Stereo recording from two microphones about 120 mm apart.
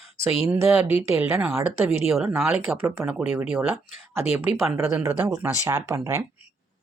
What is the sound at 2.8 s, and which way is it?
Speech, 20° right (ahead or behind).